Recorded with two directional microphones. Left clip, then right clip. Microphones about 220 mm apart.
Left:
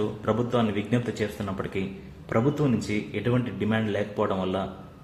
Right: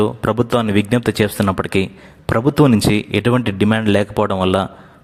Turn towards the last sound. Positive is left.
turn(degrees=-50)  # may be behind; listen again after turning